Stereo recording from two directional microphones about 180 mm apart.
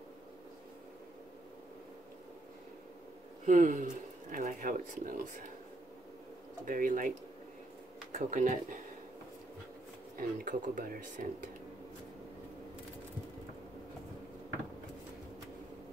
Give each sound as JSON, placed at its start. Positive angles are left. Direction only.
{"t": 3.4, "sound": "speech", "side_deg": -45}
{"t": 6.6, "sound": "speech", "side_deg": -50}
{"t": 10.1, "sound": "speech", "side_deg": -50}